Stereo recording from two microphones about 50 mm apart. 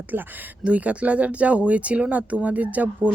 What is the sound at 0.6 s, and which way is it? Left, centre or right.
Speech, right.